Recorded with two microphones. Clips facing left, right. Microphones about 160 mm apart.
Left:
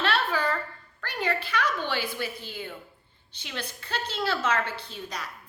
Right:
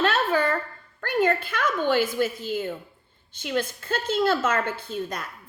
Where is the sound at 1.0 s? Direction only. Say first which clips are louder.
Right 7 dB; 50° right (ahead or behind).